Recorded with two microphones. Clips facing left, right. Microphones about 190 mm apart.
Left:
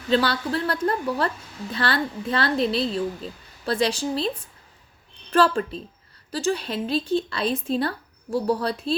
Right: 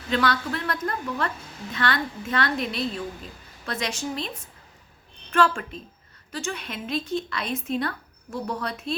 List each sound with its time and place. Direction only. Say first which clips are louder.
0.1 s speech: left 3 dB; 30° left (ahead or behind)
5.3 s speech: left 3 dB; 35° left (ahead or behind)